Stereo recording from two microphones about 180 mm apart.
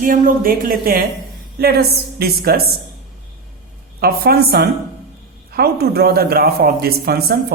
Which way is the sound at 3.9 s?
60° right (ahead or behind).